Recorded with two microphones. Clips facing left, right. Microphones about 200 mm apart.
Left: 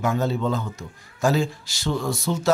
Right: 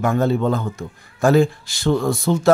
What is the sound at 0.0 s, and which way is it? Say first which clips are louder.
A man's voice: right 5 dB; 55° right (ahead or behind).